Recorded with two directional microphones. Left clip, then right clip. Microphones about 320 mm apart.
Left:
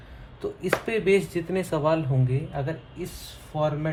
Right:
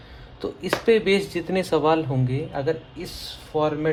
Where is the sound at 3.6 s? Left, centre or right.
Right.